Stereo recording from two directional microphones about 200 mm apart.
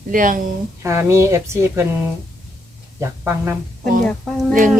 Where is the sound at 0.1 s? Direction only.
45° right (ahead or behind).